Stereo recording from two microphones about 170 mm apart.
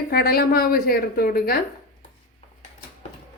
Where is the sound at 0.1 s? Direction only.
65° left (ahead or behind).